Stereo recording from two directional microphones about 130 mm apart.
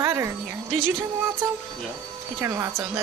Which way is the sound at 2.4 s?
20° right (ahead or behind).